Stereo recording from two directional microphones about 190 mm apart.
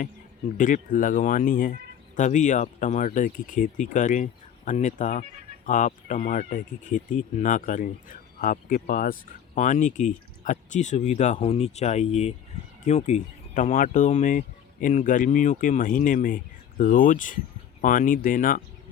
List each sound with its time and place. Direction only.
0.0 s speech: 40° left (ahead or behind)